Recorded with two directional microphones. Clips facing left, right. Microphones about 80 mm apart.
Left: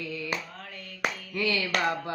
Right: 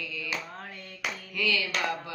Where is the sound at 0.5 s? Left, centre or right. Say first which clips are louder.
Right 1 dB; right.